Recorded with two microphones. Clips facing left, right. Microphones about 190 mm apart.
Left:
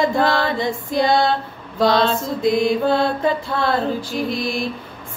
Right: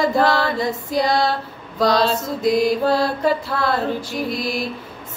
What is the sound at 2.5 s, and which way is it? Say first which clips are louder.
Speech: even; 25° left (ahead or behind).